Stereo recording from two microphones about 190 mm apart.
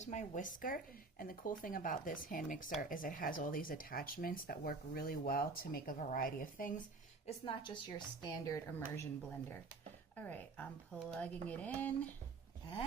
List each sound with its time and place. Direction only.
0.0 s speech: 40° left (ahead or behind)
7.3 s a woman's voice: 25° left (ahead or behind)
10.2 s speech: 10° left (ahead or behind)